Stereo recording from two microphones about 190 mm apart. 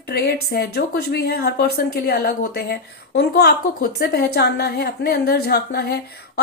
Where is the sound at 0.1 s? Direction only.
55° left (ahead or behind).